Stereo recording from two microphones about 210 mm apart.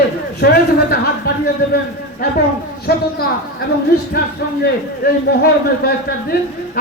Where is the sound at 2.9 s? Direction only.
50° left (ahead or behind).